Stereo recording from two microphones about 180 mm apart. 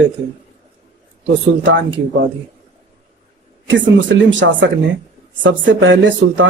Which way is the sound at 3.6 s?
90° right.